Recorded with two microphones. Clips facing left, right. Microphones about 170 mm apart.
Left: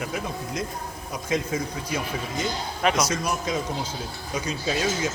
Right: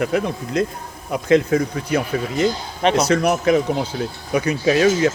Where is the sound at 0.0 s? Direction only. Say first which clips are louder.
Right 9 dB; 65° right (ahead or behind).